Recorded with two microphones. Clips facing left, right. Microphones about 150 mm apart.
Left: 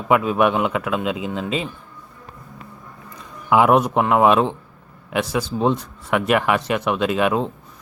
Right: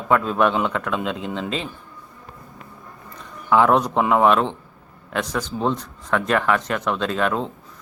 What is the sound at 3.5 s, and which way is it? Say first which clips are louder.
A man's voice: left 2 dB; 10° left (ahead or behind).